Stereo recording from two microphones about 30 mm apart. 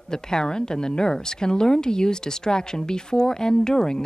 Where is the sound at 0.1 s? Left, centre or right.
Left.